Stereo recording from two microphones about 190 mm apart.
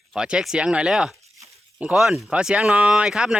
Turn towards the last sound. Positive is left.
turn(degrees=-5)  # may be behind; listen again after turning